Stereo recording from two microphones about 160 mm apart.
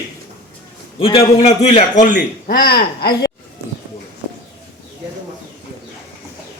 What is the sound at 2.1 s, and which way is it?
Speech, 70° left (ahead or behind).